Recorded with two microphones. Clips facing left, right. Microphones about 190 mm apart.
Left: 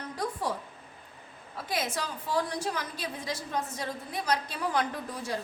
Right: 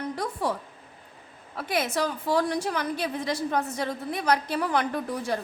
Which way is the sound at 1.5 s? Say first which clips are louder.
Right 6 dB; 65° right (ahead or behind).